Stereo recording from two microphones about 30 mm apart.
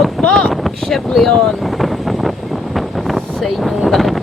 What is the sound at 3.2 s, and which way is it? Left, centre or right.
Wind noise, centre.